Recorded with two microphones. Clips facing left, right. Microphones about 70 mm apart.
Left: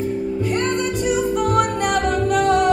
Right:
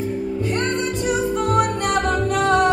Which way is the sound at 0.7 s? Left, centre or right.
Right.